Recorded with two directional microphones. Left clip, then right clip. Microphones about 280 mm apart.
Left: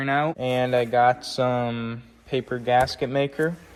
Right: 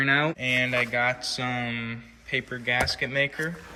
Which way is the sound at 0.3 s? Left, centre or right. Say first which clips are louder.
Left 2 dB; centre.